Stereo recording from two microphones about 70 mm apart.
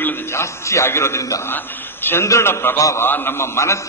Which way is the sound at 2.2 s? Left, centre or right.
Left.